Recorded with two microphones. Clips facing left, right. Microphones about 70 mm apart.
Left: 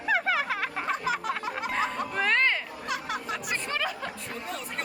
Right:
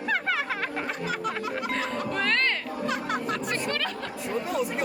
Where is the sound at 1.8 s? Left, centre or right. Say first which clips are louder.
Even; centre.